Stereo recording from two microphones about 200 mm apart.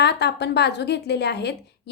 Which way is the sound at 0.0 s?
55° left (ahead or behind).